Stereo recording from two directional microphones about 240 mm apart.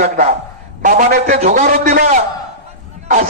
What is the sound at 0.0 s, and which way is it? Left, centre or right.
A man's voice, right.